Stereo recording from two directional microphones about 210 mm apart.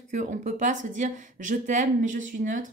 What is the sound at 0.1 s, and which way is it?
Speech, 35° right (ahead or behind).